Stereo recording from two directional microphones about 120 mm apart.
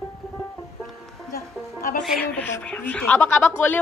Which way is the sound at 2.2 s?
15° left (ahead or behind).